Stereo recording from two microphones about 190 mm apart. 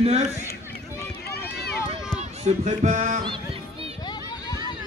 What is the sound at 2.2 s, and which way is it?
Speech, 35° right (ahead or behind).